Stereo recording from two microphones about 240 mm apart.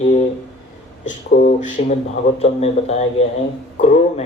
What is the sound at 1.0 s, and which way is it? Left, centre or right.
Speech, left.